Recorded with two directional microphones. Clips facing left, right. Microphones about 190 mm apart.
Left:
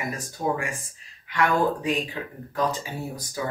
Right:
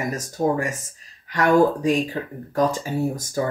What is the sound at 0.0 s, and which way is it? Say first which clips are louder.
Speech: right 6 dB; 45° right (ahead or behind).